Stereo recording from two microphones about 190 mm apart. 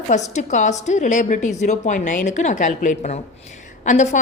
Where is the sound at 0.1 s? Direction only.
40° left (ahead or behind).